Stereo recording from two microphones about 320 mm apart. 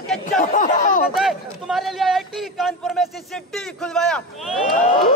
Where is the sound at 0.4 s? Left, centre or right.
Left.